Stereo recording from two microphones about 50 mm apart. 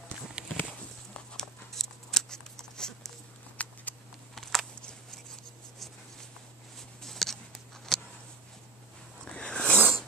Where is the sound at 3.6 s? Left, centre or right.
Left.